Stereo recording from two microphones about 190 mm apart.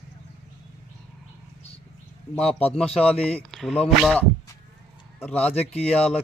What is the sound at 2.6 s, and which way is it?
A man's voice, 5° left (ahead or behind).